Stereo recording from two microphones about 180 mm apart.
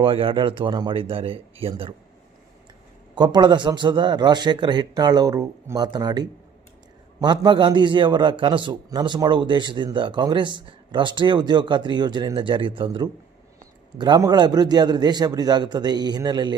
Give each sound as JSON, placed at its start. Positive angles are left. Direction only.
{"t": 0.0, "sound": "a man's voice", "side_deg": -30}
{"t": 3.2, "sound": "a man's voice", "side_deg": -25}